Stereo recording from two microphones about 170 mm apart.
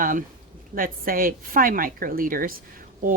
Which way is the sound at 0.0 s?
55° right (ahead or behind).